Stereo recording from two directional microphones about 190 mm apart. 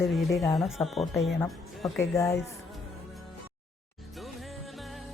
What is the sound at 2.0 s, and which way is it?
Speech, 15° left (ahead or behind).